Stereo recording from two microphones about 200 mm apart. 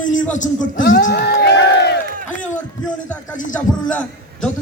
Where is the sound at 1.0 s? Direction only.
50° left (ahead or behind).